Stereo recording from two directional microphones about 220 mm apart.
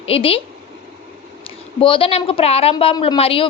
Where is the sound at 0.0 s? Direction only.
25° left (ahead or behind).